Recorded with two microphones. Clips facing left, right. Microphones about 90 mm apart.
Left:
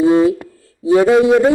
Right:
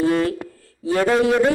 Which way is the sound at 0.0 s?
15° left (ahead or behind).